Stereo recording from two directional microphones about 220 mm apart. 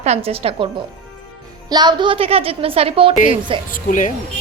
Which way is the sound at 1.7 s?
20° right (ahead or behind).